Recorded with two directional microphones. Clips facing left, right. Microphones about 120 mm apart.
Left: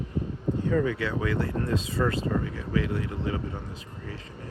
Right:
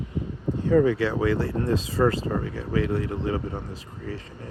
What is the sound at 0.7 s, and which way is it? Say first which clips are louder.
Speech: right 8 dB; 35° right (ahead or behind).